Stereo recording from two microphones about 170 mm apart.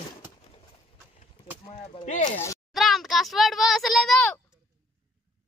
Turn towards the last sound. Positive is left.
turn(degrees=0)  # may be behind; listen again after turning